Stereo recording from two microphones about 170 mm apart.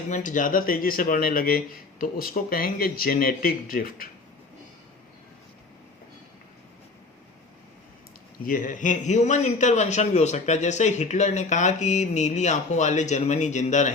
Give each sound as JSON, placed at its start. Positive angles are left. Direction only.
{"t": 0.1, "sound": "speech", "side_deg": 50}
{"t": 8.4, "sound": "a man's voice", "side_deg": 50}